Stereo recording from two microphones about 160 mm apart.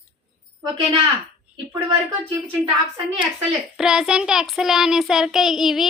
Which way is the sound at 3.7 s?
5° right (ahead or behind).